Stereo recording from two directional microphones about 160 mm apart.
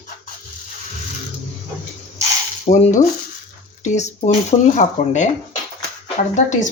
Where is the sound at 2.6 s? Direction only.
45° left (ahead or behind).